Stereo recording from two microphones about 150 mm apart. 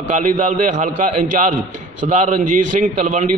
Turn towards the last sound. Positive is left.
turn(degrees=-55)  # may be behind; listen again after turning